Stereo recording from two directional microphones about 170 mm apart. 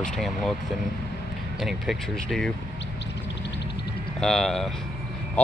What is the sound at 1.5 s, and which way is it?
Speech, centre (ahead or behind).